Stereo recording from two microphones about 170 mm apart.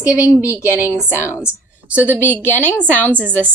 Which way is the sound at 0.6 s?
15° left (ahead or behind).